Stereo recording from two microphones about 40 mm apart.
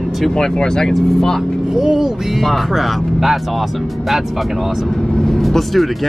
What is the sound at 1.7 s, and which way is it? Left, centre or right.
Vehicle, centre.